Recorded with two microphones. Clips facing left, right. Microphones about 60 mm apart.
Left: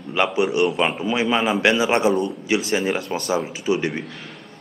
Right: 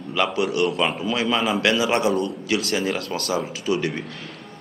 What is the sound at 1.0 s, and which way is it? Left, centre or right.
A man's voice, left.